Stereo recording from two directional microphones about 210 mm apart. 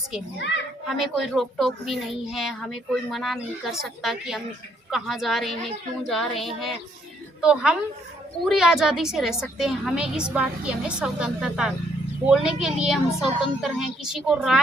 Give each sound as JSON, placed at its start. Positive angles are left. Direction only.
{"t": 0.3, "sound": "a child's voice", "side_deg": 60}
{"t": 0.9, "sound": "a woman's voice", "side_deg": 0}